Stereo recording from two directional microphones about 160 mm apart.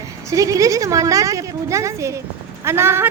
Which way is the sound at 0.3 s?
20° right (ahead or behind).